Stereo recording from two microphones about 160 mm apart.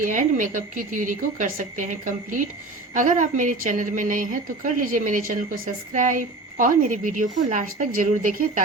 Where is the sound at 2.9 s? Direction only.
55° right (ahead or behind).